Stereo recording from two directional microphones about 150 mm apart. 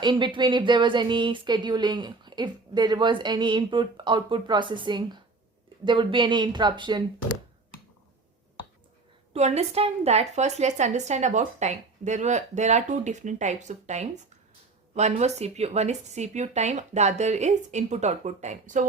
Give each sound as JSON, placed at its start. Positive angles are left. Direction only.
{"t": 0.0, "sound": "speech", "side_deg": -30}
{"t": 9.3, "sound": "a woman's voice", "side_deg": -45}